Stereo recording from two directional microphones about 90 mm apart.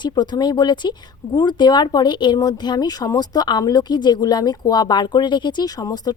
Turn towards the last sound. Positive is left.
turn(degrees=45)  # may be behind; listen again after turning